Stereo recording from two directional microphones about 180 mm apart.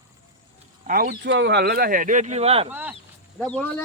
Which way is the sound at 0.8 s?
50° right (ahead or behind).